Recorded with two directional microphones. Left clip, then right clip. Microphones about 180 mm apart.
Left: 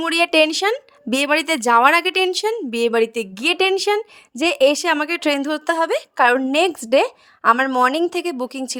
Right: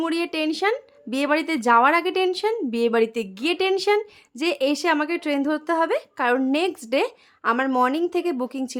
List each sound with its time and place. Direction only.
0.0 s a woman's voice: 40° left (ahead or behind)